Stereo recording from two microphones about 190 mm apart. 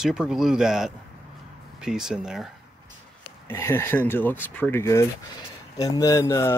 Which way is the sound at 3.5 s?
10° left (ahead or behind).